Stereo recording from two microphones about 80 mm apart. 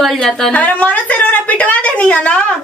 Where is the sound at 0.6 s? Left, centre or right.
Centre.